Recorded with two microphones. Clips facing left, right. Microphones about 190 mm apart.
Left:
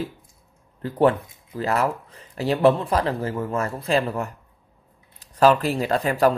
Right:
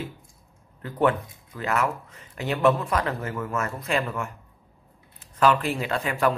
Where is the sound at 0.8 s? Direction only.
30° left (ahead or behind).